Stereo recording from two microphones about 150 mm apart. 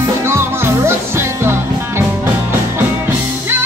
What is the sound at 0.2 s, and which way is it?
Music, 15° right (ahead or behind).